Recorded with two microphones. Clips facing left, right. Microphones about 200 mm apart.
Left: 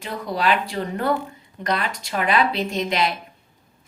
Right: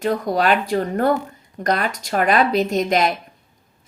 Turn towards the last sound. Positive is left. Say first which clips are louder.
# right 4 dB
turn(degrees=-45)  # may be behind; listen again after turning